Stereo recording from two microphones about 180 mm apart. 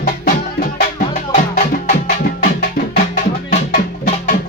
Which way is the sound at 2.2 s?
55° left (ahead or behind).